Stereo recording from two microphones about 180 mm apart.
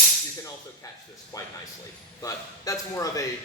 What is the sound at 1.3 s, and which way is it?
A man's voice, 20° left (ahead or behind).